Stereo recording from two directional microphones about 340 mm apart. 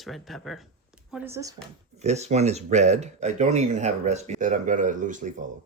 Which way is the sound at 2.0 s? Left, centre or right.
Centre.